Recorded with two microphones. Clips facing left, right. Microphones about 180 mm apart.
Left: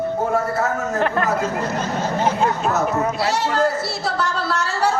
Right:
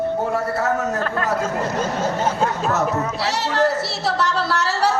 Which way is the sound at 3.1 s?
75° right (ahead or behind).